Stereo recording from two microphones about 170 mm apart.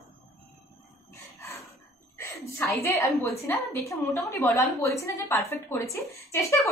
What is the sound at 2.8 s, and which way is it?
A woman's voice, 15° left (ahead or behind).